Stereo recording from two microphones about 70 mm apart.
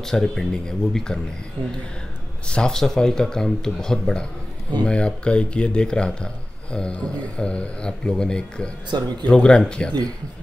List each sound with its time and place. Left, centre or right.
0.0 s speech: centre
2.4 s speech: centre